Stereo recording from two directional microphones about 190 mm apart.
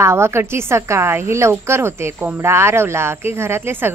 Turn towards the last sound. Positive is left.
turn(degrees=-10)  # may be behind; listen again after turning